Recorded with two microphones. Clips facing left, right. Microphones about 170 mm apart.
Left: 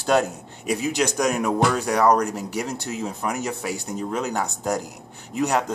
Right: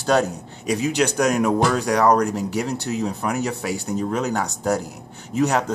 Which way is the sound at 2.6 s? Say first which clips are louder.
Right 4 dB; 35° right (ahead or behind).